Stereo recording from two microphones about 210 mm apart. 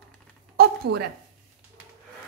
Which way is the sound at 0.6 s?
50° right (ahead or behind).